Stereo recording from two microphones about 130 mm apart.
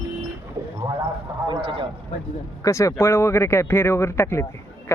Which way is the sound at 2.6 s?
25° left (ahead or behind).